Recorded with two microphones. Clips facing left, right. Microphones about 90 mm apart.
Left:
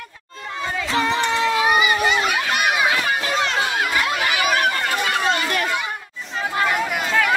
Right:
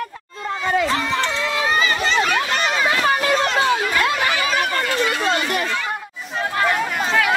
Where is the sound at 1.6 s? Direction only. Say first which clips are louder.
Even; 15° left (ahead or behind).